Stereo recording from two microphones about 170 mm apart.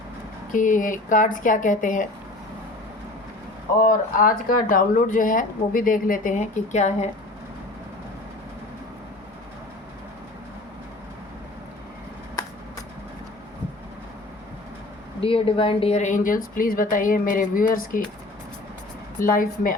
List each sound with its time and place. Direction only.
0.5 s speech: 50° left (ahead or behind)
3.8 s speech: 55° left (ahead or behind)
15.2 s speech: 30° left (ahead or behind); by 18.0 s 55° left (ahead or behind)
19.2 s a woman's voice: 55° left (ahead or behind)